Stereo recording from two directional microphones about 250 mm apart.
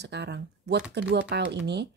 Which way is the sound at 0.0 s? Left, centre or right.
Right.